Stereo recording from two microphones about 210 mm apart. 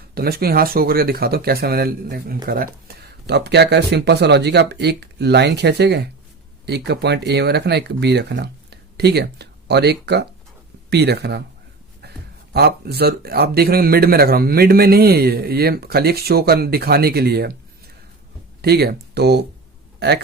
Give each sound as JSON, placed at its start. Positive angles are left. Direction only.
{"t": 0.1, "sound": "speech", "side_deg": -45}
{"t": 12.0, "sound": "a sound", "side_deg": -50}
{"t": 12.5, "sound": "speech", "side_deg": -50}